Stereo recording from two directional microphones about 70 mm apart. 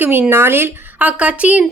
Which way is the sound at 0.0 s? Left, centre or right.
Right.